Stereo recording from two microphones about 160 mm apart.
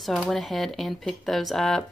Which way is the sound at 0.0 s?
Centre (ahead or behind).